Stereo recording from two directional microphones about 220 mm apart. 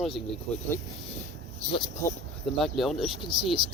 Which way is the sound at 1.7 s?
20° left (ahead or behind).